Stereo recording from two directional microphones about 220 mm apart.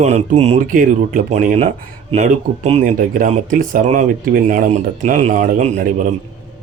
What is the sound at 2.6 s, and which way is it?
Speech, 30° right (ahead or behind).